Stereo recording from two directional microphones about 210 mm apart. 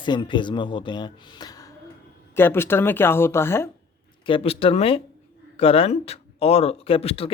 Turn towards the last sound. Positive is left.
turn(degrees=25)  # may be behind; listen again after turning